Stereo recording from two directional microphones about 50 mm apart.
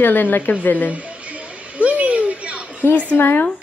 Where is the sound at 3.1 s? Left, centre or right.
Left.